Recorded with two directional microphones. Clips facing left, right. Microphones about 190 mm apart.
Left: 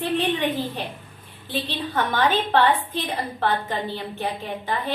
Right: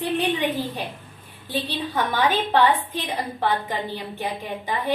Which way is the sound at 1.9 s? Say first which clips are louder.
Left 1 dB; 10° right (ahead or behind).